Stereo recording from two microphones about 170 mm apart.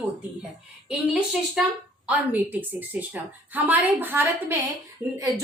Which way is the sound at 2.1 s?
10° right (ahead or behind).